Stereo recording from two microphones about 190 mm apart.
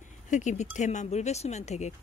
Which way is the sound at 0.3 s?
40° left (ahead or behind).